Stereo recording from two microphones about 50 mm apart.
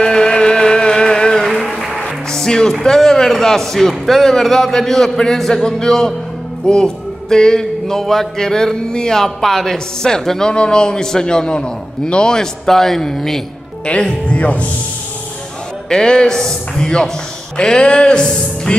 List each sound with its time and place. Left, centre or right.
0.0 s music: centre
2.0 s speech: centre
13.8 s speech: left
15.9 s speech: centre